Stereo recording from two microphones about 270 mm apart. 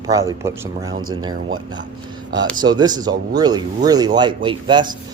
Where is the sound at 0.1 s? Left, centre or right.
Centre.